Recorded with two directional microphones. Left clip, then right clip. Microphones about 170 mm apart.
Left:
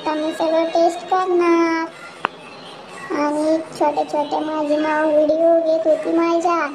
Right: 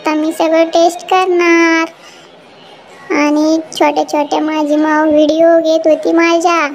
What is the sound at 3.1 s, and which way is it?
A child's voice, 40° right (ahead or behind).